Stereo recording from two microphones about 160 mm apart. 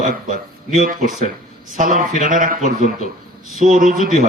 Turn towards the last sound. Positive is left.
turn(degrees=-55)  # may be behind; listen again after turning